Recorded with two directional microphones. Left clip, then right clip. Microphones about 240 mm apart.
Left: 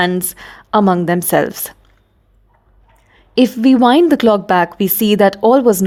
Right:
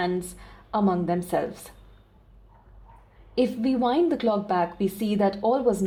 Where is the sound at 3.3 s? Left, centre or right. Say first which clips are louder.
Left 12 dB; left.